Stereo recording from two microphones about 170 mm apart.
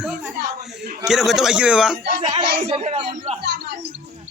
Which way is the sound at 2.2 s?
30° right (ahead or behind).